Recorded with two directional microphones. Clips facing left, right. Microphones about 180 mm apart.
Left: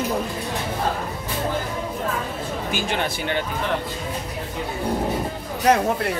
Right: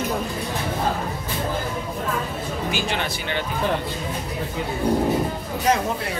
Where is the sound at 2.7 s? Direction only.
50° left (ahead or behind).